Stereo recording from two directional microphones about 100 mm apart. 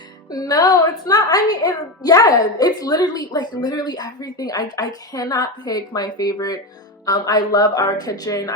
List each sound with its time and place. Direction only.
0.3 s a woman's voice: 40° left (ahead or behind)